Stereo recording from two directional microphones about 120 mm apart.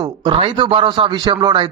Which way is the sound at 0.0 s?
40° right (ahead or behind).